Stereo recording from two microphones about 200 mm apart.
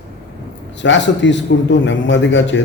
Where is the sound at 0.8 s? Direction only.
65° left (ahead or behind).